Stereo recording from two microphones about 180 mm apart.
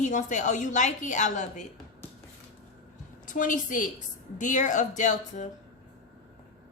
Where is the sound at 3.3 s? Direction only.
45° left (ahead or behind).